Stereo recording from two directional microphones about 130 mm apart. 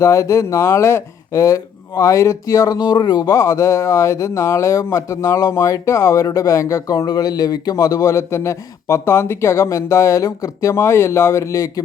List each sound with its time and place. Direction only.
0.0 s speech: 25° left (ahead or behind)